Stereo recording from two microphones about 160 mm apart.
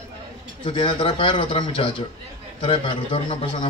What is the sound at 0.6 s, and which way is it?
A man's voice, 30° left (ahead or behind).